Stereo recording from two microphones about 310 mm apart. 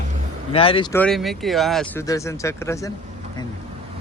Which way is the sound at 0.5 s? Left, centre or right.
Centre.